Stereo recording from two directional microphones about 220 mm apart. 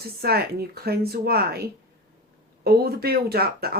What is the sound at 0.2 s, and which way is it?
Speech, 45° right (ahead or behind).